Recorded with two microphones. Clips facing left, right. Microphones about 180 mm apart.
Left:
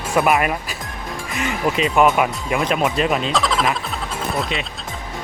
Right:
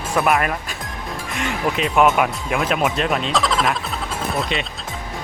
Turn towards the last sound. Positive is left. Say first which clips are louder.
# even
turn(degrees=0)  # may be behind; listen again after turning